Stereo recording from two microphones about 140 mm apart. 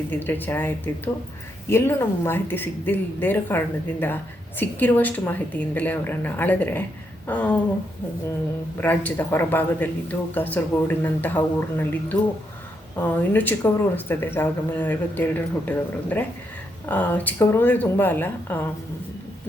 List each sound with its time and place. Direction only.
0.1 s speech: 15° left (ahead or behind)
8.8 s speech: 15° left (ahead or behind)